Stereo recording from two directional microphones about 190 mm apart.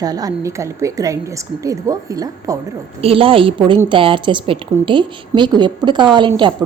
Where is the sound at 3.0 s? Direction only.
30° right (ahead or behind).